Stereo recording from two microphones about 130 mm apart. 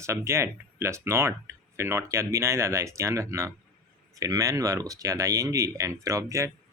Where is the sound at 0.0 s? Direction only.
20° right (ahead or behind).